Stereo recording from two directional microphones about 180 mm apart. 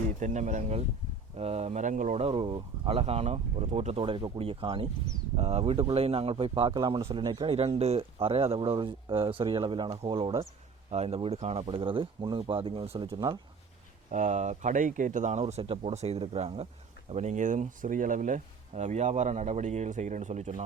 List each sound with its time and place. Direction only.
0.2 s speech: 45° right (ahead or behind)
2.2 s speech: 30° right (ahead or behind)
14.1 s speech: 40° right (ahead or behind)